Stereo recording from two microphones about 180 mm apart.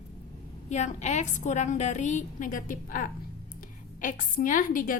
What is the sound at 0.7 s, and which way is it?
A woman's voice, 40° left (ahead or behind).